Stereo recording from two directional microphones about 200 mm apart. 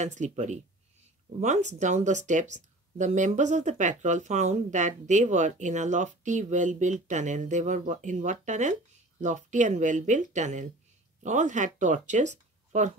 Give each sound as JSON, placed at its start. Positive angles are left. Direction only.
{"t": 0.0, "sound": "speech", "side_deg": -35}